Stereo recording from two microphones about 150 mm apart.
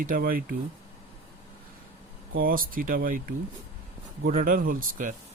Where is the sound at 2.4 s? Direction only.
75° right (ahead or behind).